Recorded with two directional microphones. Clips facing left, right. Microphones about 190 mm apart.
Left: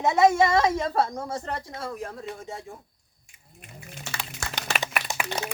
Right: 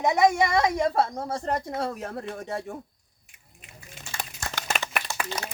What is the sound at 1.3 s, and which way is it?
Speech, 45° right (ahead or behind).